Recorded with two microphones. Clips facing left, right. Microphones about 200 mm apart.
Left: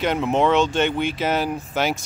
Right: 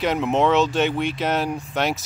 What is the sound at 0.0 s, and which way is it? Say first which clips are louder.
Speech: even; centre (ahead or behind).